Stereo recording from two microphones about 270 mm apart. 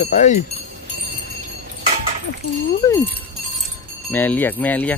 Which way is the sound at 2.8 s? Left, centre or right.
Centre.